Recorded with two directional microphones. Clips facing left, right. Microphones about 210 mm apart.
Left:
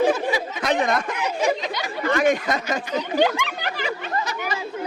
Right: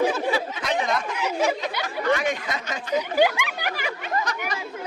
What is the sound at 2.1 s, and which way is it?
Speech, 45° left (ahead or behind).